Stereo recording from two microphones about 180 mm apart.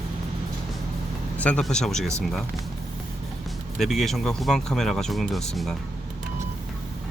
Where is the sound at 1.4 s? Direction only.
5° left (ahead or behind).